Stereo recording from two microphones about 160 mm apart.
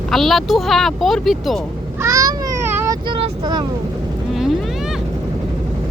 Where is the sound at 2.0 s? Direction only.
20° right (ahead or behind).